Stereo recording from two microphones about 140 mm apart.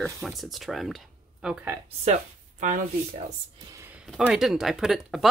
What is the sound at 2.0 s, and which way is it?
Speech, 60° right (ahead or behind).